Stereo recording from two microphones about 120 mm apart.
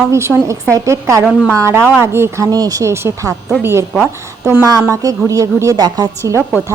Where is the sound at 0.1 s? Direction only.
20° right (ahead or behind).